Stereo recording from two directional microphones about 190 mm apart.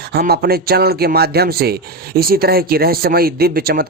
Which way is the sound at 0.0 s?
55° right (ahead or behind).